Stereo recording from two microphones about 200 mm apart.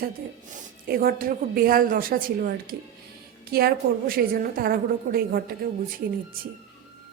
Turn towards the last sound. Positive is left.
turn(degrees=-45)  # may be behind; listen again after turning